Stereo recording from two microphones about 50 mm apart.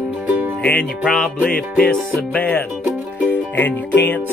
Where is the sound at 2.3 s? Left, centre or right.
Left.